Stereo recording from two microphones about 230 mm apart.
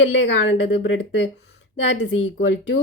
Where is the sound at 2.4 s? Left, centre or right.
Left.